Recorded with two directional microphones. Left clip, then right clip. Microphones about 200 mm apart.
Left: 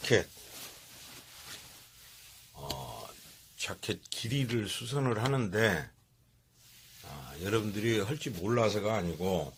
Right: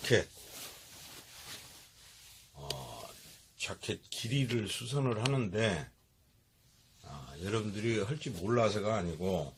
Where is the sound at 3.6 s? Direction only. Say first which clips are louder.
Left 2 dB; 30° left (ahead or behind).